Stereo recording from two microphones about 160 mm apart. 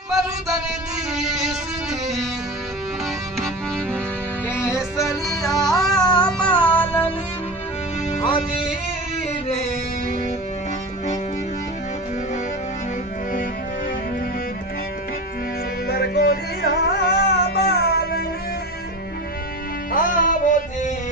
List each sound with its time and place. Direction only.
0.1 s music: centre (ahead or behind)
4.6 s music: 20° left (ahead or behind)
6.2 s music: 5° left (ahead or behind)
15.9 s music: 80° left
19.9 s music: 60° left (ahead or behind)